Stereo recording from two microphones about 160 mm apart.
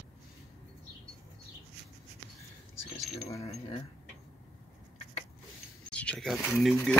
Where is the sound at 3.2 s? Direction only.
40° left (ahead or behind).